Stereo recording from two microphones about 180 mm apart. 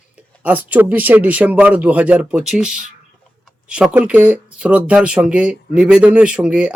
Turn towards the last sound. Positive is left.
turn(degrees=-5)  # may be behind; listen again after turning